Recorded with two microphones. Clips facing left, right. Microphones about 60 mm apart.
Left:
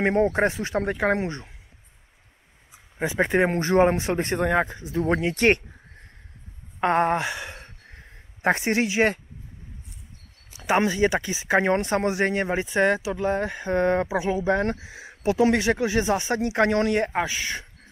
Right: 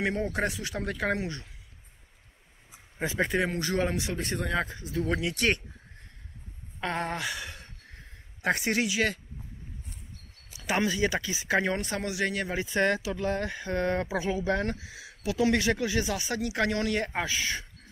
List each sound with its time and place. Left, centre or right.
0.0 s speech: left
3.0 s speech: left
6.8 s a sound: left
10.5 s speech: left